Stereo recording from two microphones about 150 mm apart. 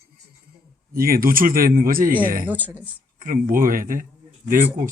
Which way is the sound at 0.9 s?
75° right (ahead or behind).